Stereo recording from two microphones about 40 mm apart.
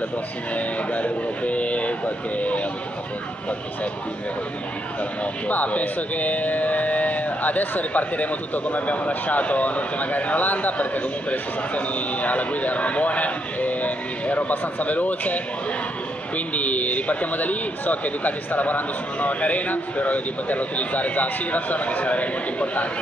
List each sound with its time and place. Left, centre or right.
0.6 s speech: left
5.5 s speech: left